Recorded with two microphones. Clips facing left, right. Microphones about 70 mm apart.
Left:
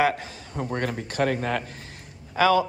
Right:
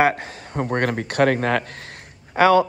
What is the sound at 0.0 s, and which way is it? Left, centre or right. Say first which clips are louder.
Speech: right 4 dB; right.